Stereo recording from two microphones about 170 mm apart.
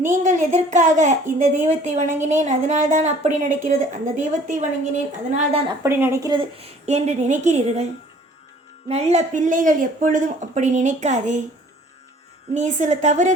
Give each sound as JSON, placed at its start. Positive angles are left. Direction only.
{"t": 0.1, "sound": "speech", "side_deg": -45}
{"t": 5.8, "sound": "speech", "side_deg": -15}
{"t": 6.6, "sound": "speech", "side_deg": -40}
{"t": 8.9, "sound": "speech", "side_deg": -40}
{"t": 12.5, "sound": "speech", "side_deg": -45}